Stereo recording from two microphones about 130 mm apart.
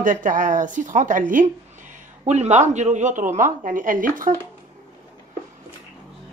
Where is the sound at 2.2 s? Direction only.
60° right (ahead or behind); by 4.3 s 90° right.